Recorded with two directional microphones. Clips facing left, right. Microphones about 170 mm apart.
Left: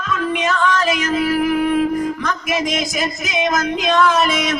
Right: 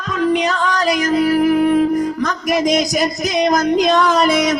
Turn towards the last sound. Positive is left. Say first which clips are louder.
# right 3 dB
turn(degrees=-40)  # may be behind; listen again after turning